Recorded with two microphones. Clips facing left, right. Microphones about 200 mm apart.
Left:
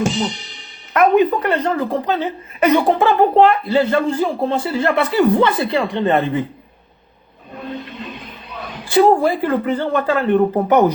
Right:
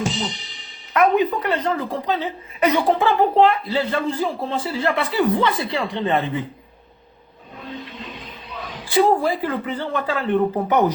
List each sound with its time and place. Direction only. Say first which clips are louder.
0.0 s a woman's voice: left 5 dB; 60° left (ahead or behind)
7.5 s speech: left 5 dB; 55° left (ahead or behind)